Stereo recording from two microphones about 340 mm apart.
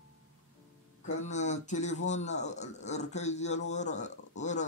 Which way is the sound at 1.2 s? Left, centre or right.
Left.